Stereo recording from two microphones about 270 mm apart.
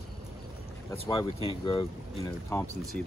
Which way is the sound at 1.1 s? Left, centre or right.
Centre.